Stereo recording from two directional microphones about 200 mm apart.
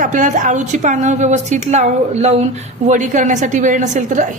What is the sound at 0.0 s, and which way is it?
A woman's voice, 40° right (ahead or behind).